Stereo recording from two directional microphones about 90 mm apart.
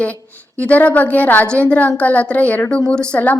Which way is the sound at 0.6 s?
15° left (ahead or behind).